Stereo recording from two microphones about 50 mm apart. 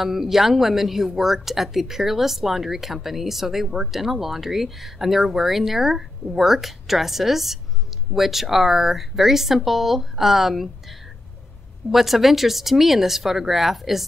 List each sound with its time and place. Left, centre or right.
0.0 s a woman's voice: centre
11.9 s a woman's voice: centre